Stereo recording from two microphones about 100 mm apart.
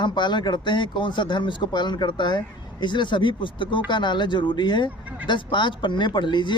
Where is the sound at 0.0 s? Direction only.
50° left (ahead or behind).